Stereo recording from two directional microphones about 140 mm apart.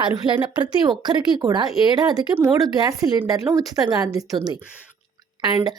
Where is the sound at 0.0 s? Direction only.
35° right (ahead or behind).